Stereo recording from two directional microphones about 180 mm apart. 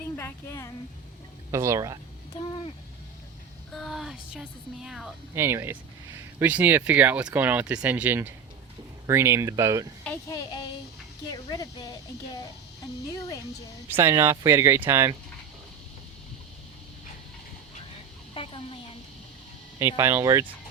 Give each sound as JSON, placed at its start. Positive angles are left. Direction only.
{"t": 0.2, "sound": "a woman's voice", "side_deg": 15}
{"t": 1.5, "sound": "speech", "side_deg": -15}
{"t": 2.3, "sound": "speech", "side_deg": 30}
{"t": 3.7, "sound": "speech", "side_deg": 0}
{"t": 5.3, "sound": "speech", "side_deg": -15}
{"t": 10.2, "sound": "speech", "side_deg": 20}
{"t": 13.9, "sound": "speech", "side_deg": -15}
{"t": 18.3, "sound": "a sound", "side_deg": 30}
{"t": 20.0, "sound": "speech", "side_deg": -15}